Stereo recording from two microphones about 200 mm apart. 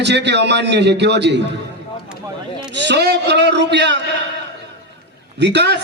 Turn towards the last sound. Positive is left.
turn(degrees=-60)  # may be behind; listen again after turning